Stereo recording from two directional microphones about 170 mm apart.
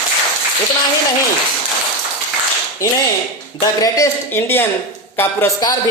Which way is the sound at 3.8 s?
20° left (ahead or behind).